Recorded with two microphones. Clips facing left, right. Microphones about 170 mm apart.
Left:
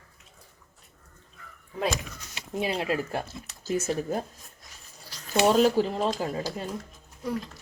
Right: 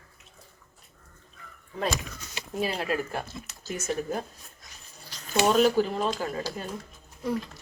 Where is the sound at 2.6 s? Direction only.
20° left (ahead or behind).